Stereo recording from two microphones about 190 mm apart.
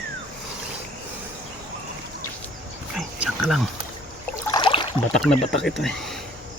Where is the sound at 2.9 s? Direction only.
Centre (ahead or behind).